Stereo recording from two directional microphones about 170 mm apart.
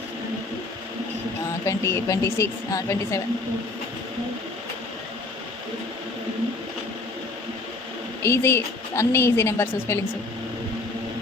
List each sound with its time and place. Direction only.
1.6 s a woman's voice: 15° left (ahead or behind)
8.2 s a woman's voice: 15° left (ahead or behind)